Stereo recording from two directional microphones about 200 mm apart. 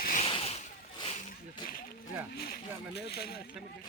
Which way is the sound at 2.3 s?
50° left (ahead or behind).